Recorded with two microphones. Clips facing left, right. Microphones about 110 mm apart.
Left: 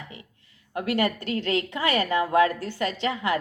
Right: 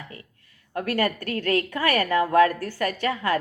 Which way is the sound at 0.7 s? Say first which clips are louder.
Even; 20° left (ahead or behind).